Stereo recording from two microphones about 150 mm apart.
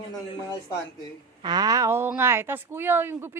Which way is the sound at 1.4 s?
30° right (ahead or behind).